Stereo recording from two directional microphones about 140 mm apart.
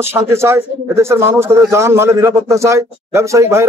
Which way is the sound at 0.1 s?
20° right (ahead or behind).